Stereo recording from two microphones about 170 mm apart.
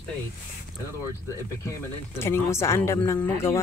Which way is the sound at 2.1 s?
15° left (ahead or behind).